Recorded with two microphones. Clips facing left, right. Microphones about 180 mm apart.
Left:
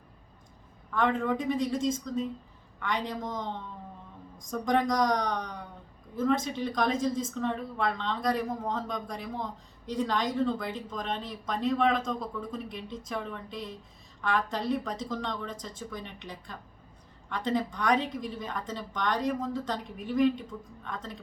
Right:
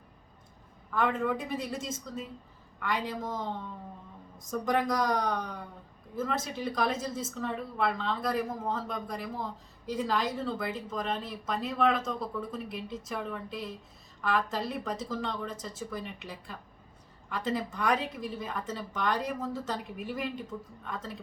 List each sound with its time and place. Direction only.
0.9 s a woman's voice: 5° right (ahead or behind)